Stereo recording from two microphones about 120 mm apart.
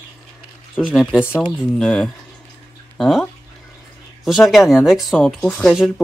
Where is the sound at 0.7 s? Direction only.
5° right (ahead or behind).